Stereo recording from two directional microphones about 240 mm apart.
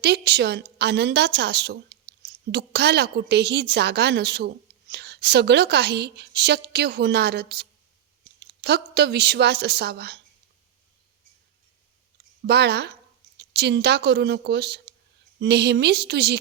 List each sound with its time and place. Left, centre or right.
0.0 s a woman's voice: right
12.5 s a woman's voice: right